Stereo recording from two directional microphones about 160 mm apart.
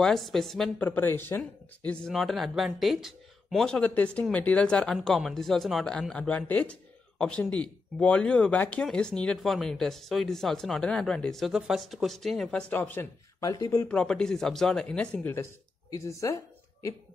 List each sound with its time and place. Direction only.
0.0 s speech: centre (ahead or behind); by 13.7 s 20° left (ahead or behind)
13.7 s speech: 10° left (ahead or behind)